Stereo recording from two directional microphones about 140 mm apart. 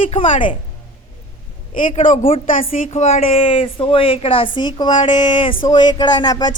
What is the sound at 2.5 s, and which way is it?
Speech, 75° left (ahead or behind).